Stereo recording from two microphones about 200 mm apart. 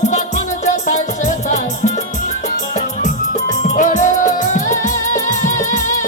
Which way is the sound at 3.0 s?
35° left (ahead or behind).